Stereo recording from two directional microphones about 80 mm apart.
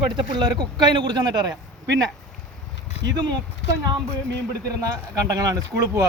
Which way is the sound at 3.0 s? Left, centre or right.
Right.